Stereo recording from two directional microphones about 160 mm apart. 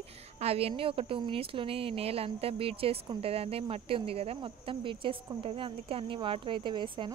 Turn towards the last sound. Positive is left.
turn(degrees=-30)  # may be behind; listen again after turning